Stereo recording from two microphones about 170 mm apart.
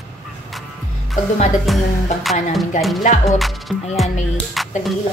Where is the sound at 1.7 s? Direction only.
Centre (ahead or behind).